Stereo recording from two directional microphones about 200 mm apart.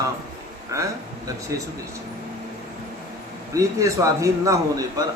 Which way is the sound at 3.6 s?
15° right (ahead or behind).